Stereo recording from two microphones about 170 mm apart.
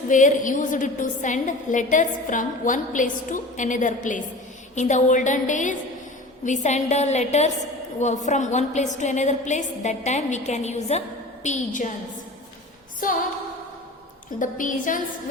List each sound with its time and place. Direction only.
0.1 s a woman's voice: 50° left (ahead or behind)
14.3 s a woman's voice: 50° left (ahead or behind)